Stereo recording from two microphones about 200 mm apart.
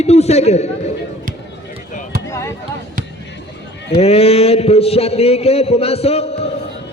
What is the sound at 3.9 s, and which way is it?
A man's voice, 30° left (ahead or behind).